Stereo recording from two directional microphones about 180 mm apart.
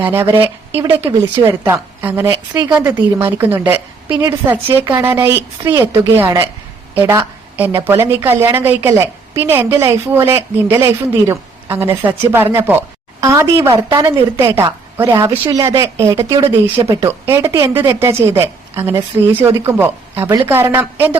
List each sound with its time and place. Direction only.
0.0 s a woman's voice: 10° right (ahead or behind)